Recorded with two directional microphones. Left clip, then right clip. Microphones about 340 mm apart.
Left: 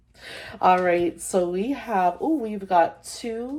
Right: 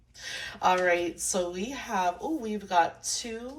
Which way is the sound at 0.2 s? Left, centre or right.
Centre.